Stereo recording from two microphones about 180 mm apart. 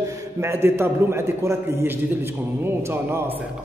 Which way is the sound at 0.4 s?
15° right (ahead or behind).